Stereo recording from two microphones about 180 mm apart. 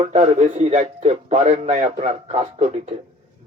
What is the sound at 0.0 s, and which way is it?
A man's voice, 40° right (ahead or behind).